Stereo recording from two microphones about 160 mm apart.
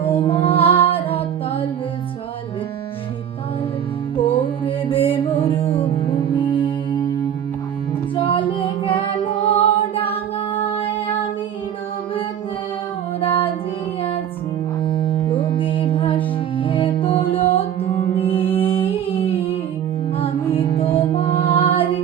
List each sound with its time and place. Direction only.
0.1 s music: 35° left (ahead or behind)
4.2 s music: 35° left (ahead or behind)
8.1 s music: 30° left (ahead or behind)
13.1 s music: 35° left (ahead or behind)
14.8 s music: 35° left (ahead or behind)